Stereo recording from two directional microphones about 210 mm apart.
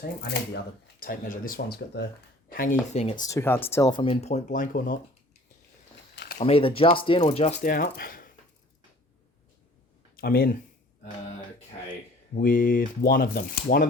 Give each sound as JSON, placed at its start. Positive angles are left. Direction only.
{"t": 0.0, "sound": "speech", "side_deg": 45}
{"t": 2.5, "sound": "speech", "side_deg": 40}
{"t": 6.1, "sound": "a sound", "side_deg": 45}
{"t": 6.4, "sound": "speech", "side_deg": 25}
{"t": 10.2, "sound": "speech", "side_deg": 45}
{"t": 12.3, "sound": "speech", "side_deg": 40}